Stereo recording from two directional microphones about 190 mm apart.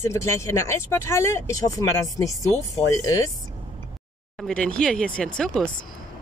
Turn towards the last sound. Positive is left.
turn(degrees=5)  # may be behind; listen again after turning